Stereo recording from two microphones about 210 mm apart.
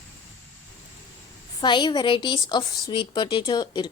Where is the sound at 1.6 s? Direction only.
20° left (ahead or behind).